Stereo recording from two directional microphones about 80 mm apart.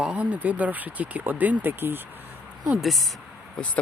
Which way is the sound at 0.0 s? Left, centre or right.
Centre.